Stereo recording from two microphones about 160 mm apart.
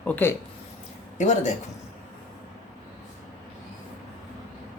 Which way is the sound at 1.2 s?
45° left (ahead or behind).